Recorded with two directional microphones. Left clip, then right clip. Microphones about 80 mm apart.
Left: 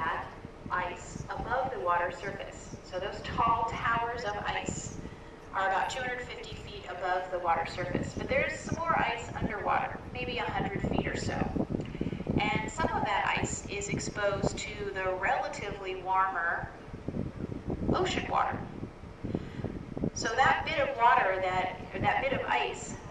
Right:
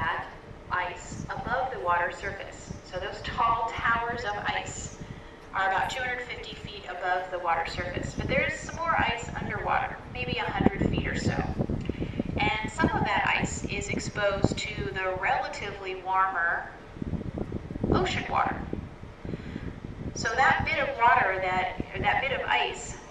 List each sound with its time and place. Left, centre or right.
0.0 s a sound: right
2.9 s speech: right
17.9 s speech: right
20.2 s speech: right